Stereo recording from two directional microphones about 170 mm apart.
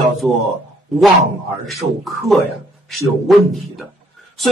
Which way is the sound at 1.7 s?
Centre (ahead or behind).